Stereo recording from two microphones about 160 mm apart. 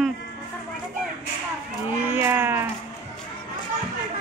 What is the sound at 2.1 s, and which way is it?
Speech, 15° right (ahead or behind).